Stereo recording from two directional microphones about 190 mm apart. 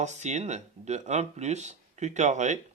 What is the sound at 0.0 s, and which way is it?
Speech, 40° right (ahead or behind).